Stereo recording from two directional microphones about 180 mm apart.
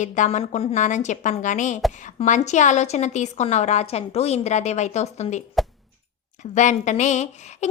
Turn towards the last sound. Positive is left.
turn(degrees=40)  # may be behind; listen again after turning